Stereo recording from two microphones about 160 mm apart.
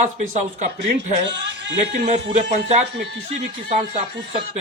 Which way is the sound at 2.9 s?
90° right.